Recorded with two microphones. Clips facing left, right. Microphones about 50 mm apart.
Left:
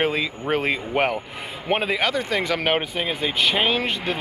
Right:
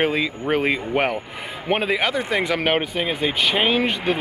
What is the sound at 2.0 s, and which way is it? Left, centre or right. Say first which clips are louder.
Speech: right 1 dB; centre.